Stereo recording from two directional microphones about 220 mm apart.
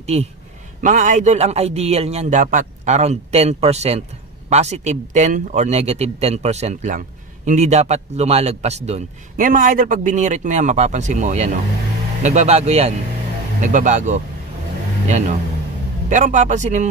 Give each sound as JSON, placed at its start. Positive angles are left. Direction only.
{"t": 0.0, "sound": "a man's voice", "side_deg": -30}
{"t": 16.1, "sound": "a man's voice", "side_deg": -35}